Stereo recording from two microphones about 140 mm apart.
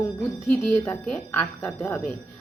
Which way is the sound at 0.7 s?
15° left (ahead or behind).